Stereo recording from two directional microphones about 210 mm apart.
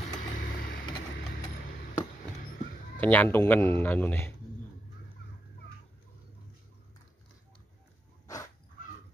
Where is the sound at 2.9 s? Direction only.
10° left (ahead or behind).